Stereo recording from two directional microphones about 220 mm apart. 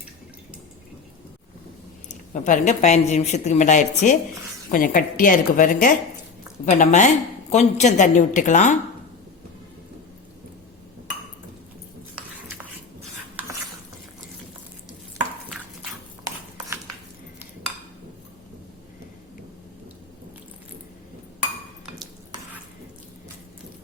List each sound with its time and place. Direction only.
2.3 s a woman's voice: 35° left (ahead or behind)